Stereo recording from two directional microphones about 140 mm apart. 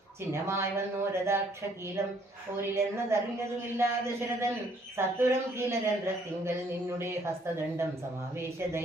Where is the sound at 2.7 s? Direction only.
20° right (ahead or behind).